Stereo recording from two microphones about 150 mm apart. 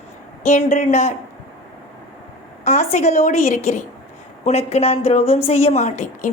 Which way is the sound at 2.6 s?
50° left (ahead or behind).